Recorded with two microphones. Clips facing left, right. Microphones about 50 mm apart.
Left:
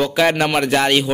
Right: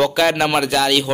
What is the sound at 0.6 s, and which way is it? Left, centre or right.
Speech, left.